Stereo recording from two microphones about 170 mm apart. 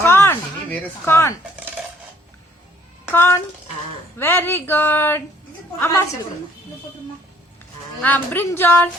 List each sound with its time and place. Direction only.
0.0 s a sound: 15° left (ahead or behind)
3.1 s speech: 15° left (ahead or behind)
8.0 s speech: 10° left (ahead or behind)